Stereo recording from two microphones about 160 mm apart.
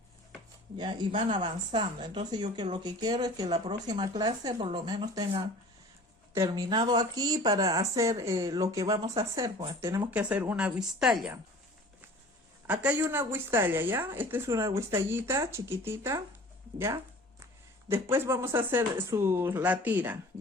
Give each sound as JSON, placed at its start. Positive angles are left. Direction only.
{"t": 0.8, "sound": "a woman's voice", "side_deg": -30}
{"t": 10.1, "sound": "speech", "side_deg": -10}
{"t": 12.6, "sound": "speech", "side_deg": -10}